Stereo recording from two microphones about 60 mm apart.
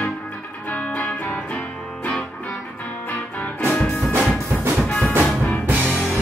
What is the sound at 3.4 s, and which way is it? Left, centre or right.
Music, left.